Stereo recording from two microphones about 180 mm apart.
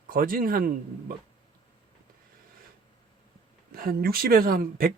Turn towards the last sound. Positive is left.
turn(degrees=-55)  # may be behind; listen again after turning